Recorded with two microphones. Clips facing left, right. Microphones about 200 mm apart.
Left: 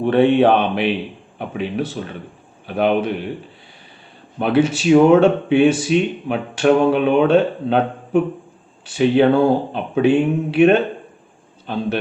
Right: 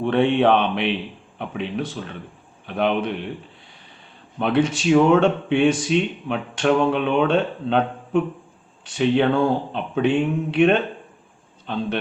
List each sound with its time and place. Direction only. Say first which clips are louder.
0.0 s a man's voice: left 4 dB; 5° left (ahead or behind)
4.4 s speech: left 3 dB; 5° left (ahead or behind)
6.7 s a sound: left 4 dB; 40° left (ahead or behind)
6.9 s speech: left 5 dB; 5° left (ahead or behind)